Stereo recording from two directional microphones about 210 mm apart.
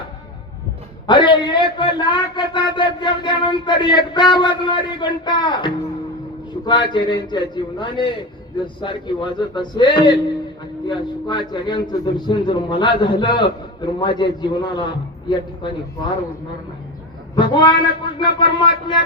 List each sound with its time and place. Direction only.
1.0 s a man's voice: 20° left (ahead or behind)
6.5 s a sound: 20° left (ahead or behind)
6.9 s a man's voice: 20° left (ahead or behind)
17.3 s a man's voice: 20° left (ahead or behind)